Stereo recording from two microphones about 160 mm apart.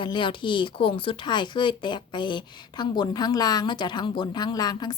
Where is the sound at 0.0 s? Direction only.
30° left (ahead or behind).